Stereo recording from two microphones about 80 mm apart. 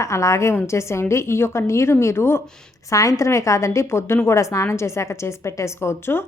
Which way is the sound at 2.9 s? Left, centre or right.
Left.